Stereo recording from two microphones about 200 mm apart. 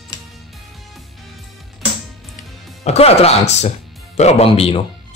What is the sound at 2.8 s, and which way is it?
Speech, 30° left (ahead or behind).